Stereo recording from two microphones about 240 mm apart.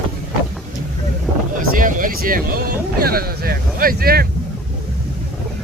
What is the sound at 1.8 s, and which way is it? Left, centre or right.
Speech, right.